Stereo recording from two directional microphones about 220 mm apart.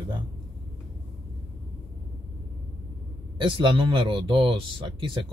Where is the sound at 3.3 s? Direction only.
20° right (ahead or behind).